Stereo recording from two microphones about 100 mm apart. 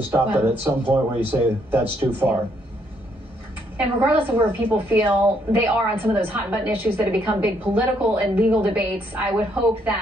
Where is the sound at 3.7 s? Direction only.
20° right (ahead or behind).